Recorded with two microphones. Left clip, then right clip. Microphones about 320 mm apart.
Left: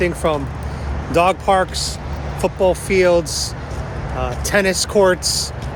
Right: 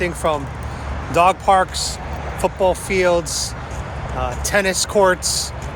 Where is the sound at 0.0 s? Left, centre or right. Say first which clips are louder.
Left 1 dB; centre.